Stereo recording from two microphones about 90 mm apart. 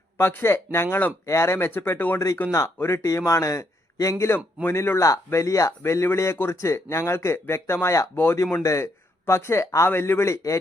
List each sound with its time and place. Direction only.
0.2 s speech: 25° left (ahead or behind)
2.5 s a man's voice: 35° left (ahead or behind)